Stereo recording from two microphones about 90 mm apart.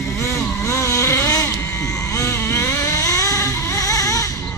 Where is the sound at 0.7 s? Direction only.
35° left (ahead or behind).